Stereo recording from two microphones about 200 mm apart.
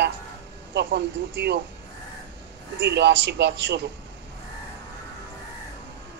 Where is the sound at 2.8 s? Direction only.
60° right (ahead or behind).